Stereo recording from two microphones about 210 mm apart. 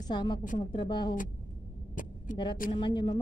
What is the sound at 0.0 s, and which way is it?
A woman's voice, 20° left (ahead or behind).